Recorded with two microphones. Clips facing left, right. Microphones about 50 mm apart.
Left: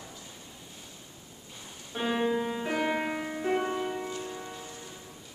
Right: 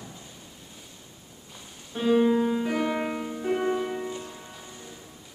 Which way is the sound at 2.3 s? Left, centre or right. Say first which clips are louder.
Right 5 dB; centre.